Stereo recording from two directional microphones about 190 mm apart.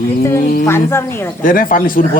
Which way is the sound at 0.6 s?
15° left (ahead or behind).